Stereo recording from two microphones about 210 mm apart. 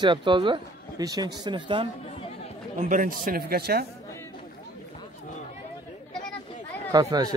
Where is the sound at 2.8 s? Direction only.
40° right (ahead or behind).